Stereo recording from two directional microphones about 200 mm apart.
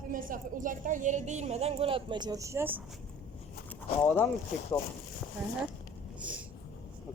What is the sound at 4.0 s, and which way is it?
Speech, 10° left (ahead or behind).